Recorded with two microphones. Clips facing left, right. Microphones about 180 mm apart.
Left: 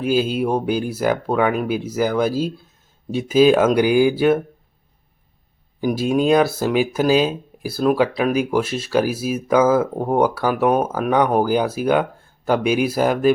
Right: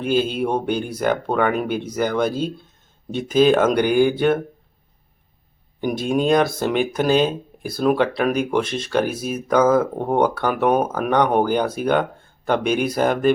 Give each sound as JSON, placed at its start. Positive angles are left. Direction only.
{"t": 0.0, "sound": "speech", "side_deg": 5}
{"t": 5.8, "sound": "speech", "side_deg": 5}